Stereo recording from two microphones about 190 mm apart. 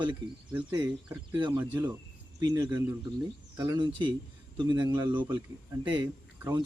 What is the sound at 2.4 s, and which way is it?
A man's voice, 20° right (ahead or behind).